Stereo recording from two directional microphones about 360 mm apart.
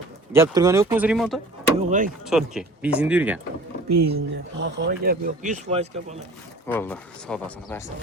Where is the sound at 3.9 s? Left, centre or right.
Right.